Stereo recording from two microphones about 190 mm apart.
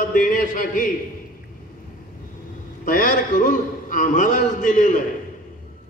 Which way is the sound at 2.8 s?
45° left (ahead or behind).